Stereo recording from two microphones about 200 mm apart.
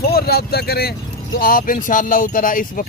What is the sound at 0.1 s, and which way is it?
Speech, 50° left (ahead or behind).